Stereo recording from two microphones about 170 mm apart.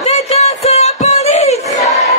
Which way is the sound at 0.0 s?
40° left (ahead or behind).